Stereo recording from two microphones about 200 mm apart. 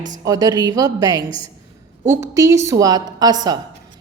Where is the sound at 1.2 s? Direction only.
25° left (ahead or behind).